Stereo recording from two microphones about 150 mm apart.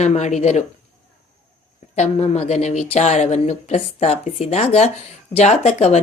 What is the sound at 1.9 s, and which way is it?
Speech, 45° left (ahead or behind).